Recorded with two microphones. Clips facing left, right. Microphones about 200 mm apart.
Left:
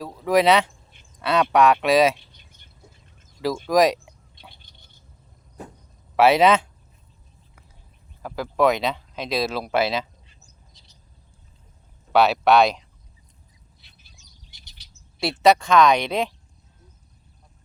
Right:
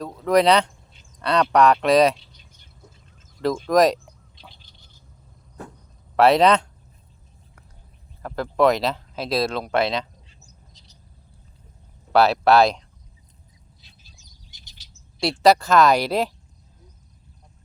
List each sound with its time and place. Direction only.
0.0 s speech: 5° left (ahead or behind)
3.4 s speech: centre (ahead or behind)
6.1 s speech: 5° left (ahead or behind)
8.2 s speech: centre (ahead or behind)
12.1 s speech: centre (ahead or behind)
14.5 s chirp: 60° left (ahead or behind)
15.2 s speech: centre (ahead or behind)